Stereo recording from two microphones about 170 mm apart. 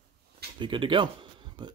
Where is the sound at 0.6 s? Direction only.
30° right (ahead or behind).